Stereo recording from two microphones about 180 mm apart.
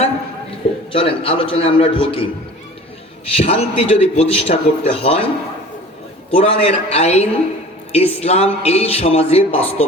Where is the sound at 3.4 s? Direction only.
35° left (ahead or behind).